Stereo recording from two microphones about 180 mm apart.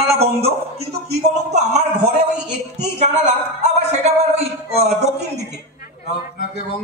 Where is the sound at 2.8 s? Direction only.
40° right (ahead or behind).